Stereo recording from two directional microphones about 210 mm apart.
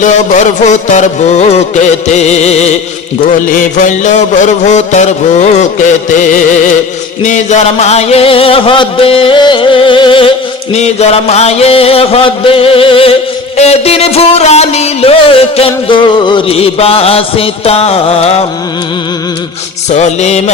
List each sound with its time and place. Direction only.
0.0 s music: 35° left (ahead or behind)
7.2 s a sound: 35° left (ahead or behind)
19.9 s music: 35° left (ahead or behind)